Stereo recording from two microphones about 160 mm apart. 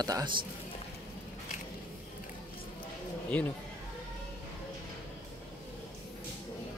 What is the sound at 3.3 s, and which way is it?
Speech, 5° left (ahead or behind).